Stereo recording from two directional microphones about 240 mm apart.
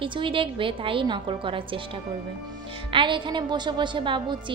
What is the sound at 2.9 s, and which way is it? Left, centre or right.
A woman's voice, right.